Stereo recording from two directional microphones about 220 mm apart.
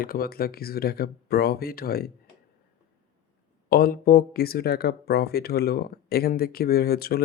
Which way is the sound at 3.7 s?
45° left (ahead or behind).